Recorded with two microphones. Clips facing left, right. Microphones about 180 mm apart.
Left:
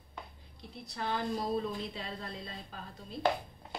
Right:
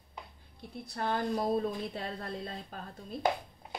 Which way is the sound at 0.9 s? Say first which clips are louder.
Right 3 dB; 50° right (ahead or behind).